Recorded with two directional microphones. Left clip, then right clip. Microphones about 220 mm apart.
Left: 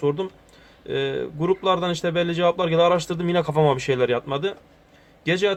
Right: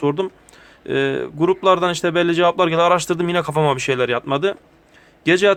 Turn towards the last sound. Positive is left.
turn(degrees=-50)  # may be behind; listen again after turning